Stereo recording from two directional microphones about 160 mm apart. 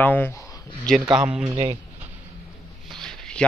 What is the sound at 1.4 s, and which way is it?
Speech, 30° right (ahead or behind).